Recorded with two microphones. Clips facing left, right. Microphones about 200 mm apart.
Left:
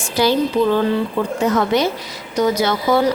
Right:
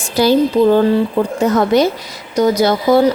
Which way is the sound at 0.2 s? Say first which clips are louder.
Right 5 dB; 40° right (ahead or behind).